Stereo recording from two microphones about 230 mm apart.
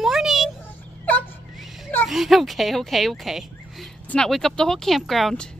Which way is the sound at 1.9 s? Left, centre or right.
Centre.